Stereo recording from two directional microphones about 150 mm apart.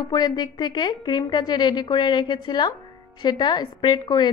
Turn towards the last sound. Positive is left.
turn(degrees=30)  # may be behind; listen again after turning